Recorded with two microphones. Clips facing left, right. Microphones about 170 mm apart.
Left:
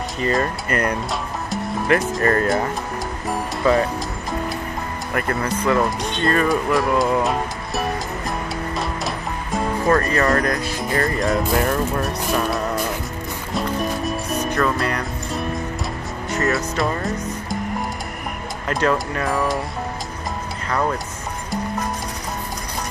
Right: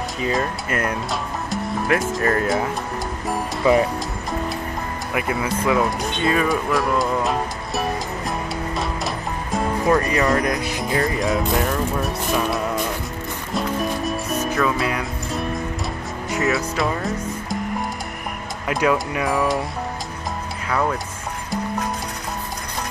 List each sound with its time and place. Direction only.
0.2 s speech: centre (ahead or behind)
3.6 s speech: 20° right (ahead or behind)
5.1 s speech: 5° right (ahead or behind)
8.7 s music: centre (ahead or behind)
9.9 s speech: 15° right (ahead or behind)
10.9 s speech: 5° right (ahead or behind)
13.5 s music: centre (ahead or behind)
16.4 s speech: centre (ahead or behind)
18.7 s speech: 10° right (ahead or behind)
20.6 s music: 5° right (ahead or behind)